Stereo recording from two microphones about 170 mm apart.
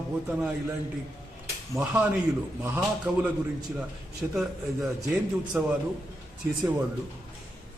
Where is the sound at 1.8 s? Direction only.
10° right (ahead or behind).